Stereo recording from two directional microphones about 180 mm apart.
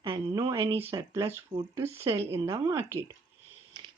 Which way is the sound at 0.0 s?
25° right (ahead or behind).